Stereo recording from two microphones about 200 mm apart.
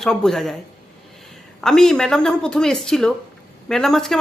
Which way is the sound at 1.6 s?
Centre (ahead or behind).